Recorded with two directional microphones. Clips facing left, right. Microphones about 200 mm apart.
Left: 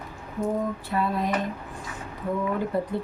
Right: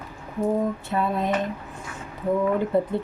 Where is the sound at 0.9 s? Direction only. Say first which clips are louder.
Right 1 dB; 25° right (ahead or behind).